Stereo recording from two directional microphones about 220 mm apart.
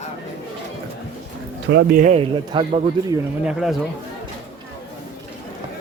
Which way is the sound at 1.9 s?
35° right (ahead or behind).